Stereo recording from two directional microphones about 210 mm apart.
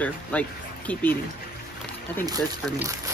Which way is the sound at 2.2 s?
15° right (ahead or behind).